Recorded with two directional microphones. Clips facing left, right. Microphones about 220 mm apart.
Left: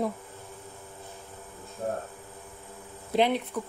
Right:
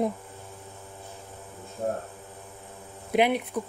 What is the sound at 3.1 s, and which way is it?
Speech, 10° right (ahead or behind).